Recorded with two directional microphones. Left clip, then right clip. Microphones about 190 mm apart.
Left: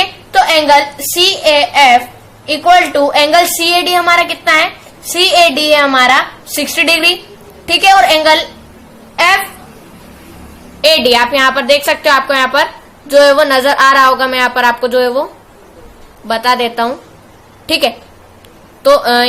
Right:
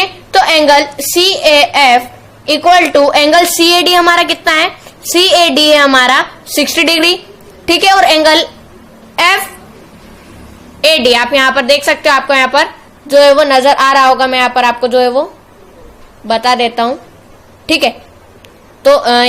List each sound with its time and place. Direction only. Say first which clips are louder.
0.0 s a woman's voice: right 1 dB; 45° right (ahead or behind)
10.8 s a woman's voice: even; 30° right (ahead or behind)